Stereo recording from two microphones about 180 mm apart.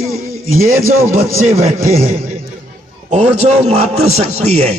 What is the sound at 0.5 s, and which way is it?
A man's voice, 15° right (ahead or behind).